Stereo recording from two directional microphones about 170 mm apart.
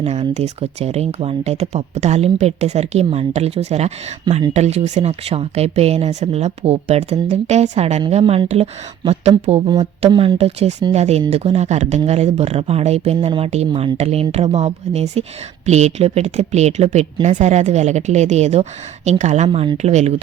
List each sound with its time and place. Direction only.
0.0 s a woman's voice: 40° right (ahead or behind)
19.5 s speech: 30° right (ahead or behind)
19.7 s speech: 40° right (ahead or behind)